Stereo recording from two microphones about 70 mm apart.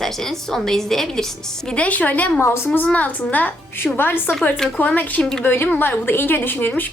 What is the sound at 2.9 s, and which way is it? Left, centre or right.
A woman's voice, left.